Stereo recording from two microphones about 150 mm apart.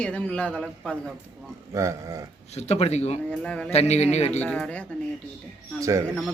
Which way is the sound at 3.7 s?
45° left (ahead or behind).